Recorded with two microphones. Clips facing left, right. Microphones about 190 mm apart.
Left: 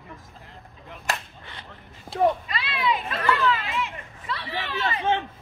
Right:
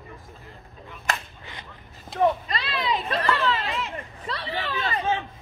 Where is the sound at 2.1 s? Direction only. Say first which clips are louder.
Left 1 dB; 10° left (ahead or behind).